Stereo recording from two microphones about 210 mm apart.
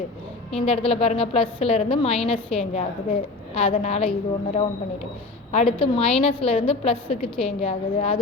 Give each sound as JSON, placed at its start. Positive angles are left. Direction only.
{"t": 0.6, "sound": "a woman's voice", "side_deg": 30}
{"t": 5.5, "sound": "a woman's voice", "side_deg": 30}